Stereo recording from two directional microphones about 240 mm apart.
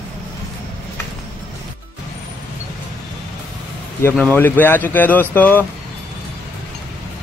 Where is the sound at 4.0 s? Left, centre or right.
Centre.